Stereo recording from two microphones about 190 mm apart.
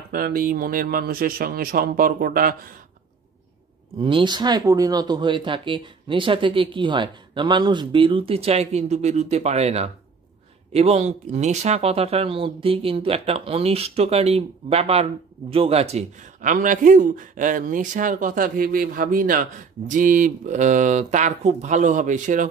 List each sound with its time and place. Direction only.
0.1 s speech: 50° right (ahead or behind)
4.0 s speech: 25° right (ahead or behind); by 22.5 s 40° right (ahead or behind)